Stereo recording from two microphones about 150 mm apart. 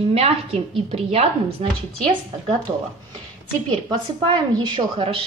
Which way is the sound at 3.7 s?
30° right (ahead or behind).